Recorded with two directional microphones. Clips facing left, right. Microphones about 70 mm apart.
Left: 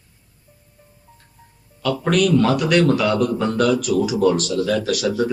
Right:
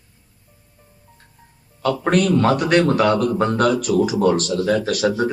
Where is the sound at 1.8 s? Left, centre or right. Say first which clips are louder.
Even; right.